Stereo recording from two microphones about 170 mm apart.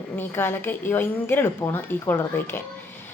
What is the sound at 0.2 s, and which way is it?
A woman's voice, 15° left (ahead or behind).